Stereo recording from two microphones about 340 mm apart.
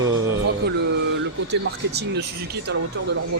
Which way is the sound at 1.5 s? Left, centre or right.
Right.